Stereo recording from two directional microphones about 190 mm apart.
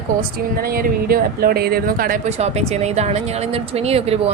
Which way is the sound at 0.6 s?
50° right (ahead or behind).